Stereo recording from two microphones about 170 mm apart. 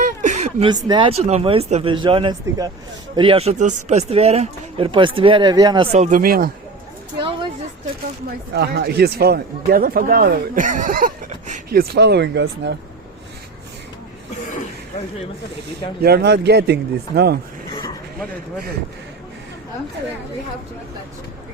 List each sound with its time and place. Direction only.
0.0 s a sound: 45° right (ahead or behind)
0.7 s speech: 25° right (ahead or behind)
5.9 s speech: 50° right (ahead or behind)
8.5 s speech: 70° right (ahead or behind); by 11.6 s 50° right (ahead or behind)
11.7 s speech: 65° right (ahead or behind); by 12.7 s 90° right
16.0 s a man's voice: 65° right (ahead or behind)